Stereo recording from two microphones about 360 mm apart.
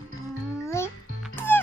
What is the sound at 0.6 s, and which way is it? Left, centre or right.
Music, centre.